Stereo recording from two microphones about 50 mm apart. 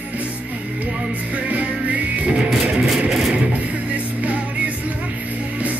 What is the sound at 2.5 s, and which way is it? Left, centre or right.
Music, centre.